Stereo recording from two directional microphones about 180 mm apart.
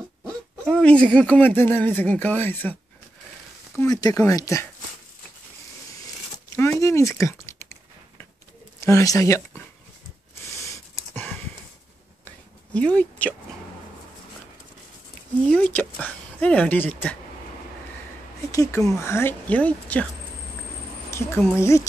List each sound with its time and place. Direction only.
0.3 s speech: 5° left (ahead or behind)
6.5 s a sound: 15° left (ahead or behind)
8.8 s speech: 15° left (ahead or behind)
10.3 s a sound: 15° left (ahead or behind)
12.7 s speech: 10° left (ahead or behind)
15.5 s speech: 10° left (ahead or behind)
18.5 s speech: 15° left (ahead or behind)
21.1 s a woman's voice: 15° left (ahead or behind)